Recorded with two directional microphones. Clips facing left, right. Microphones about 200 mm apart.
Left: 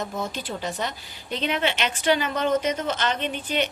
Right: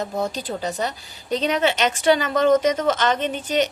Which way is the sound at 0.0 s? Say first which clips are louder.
Right 5 dB; 40° right (ahead or behind).